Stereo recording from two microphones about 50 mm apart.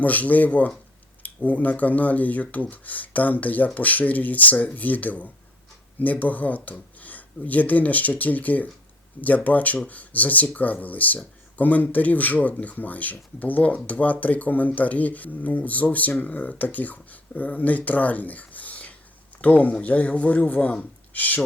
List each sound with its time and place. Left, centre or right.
0.0 s speech: left